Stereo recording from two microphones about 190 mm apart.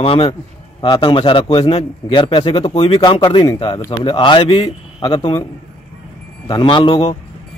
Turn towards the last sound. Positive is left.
turn(degrees=30)  # may be behind; listen again after turning